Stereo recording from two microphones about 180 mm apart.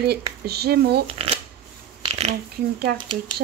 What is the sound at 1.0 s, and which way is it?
Speech, 30° right (ahead or behind).